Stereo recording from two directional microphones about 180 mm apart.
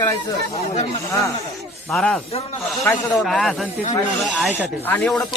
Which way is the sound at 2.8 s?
15° left (ahead or behind).